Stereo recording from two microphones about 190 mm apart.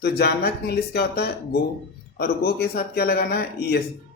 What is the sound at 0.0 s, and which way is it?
Speech, 60° left (ahead or behind).